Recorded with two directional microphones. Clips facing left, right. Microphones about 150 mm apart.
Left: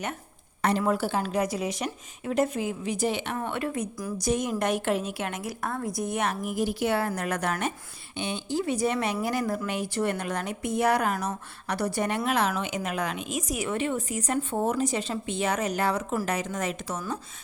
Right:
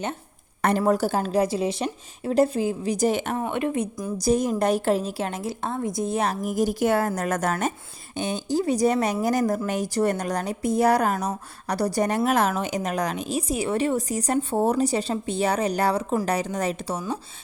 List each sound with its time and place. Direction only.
0.6 s speech: 45° right (ahead or behind)
3.4 s speech: 20° right (ahead or behind)
4.2 s speech: 35° right (ahead or behind)